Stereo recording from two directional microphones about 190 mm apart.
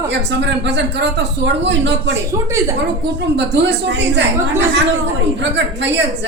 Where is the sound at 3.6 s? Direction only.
65° right (ahead or behind).